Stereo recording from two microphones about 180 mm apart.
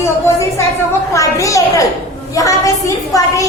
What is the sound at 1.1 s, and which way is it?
A woman's voice, 15° left (ahead or behind).